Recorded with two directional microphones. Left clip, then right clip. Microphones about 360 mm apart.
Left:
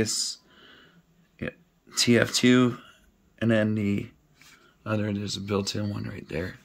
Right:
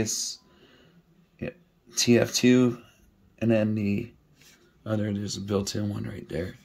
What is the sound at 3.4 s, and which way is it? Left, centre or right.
Speech, centre.